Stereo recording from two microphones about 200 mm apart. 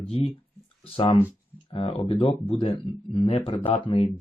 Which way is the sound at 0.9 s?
25° left (ahead or behind).